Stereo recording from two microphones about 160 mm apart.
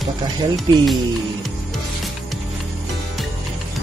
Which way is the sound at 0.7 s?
30° right (ahead or behind).